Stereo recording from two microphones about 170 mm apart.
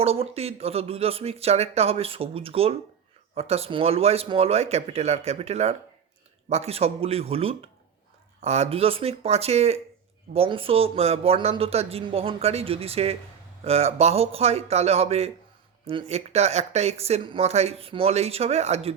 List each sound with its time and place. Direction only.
0.0 s speech: 35° right (ahead or behind)